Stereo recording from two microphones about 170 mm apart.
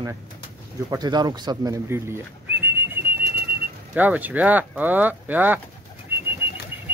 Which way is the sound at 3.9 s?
10° right (ahead or behind).